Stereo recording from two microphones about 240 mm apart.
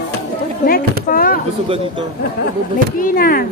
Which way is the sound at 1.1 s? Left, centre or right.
Left.